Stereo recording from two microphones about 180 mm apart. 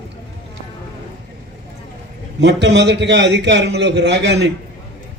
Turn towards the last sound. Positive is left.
turn(degrees=-70)  # may be behind; listen again after turning